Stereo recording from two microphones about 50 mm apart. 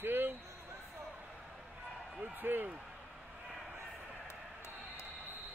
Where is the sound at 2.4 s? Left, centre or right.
Right.